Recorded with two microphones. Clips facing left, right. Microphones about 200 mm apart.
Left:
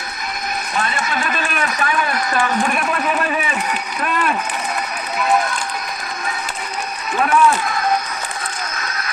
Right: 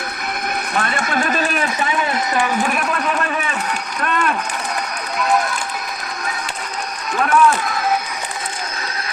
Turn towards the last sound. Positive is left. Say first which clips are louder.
# even
turn(degrees=0)  # may be behind; listen again after turning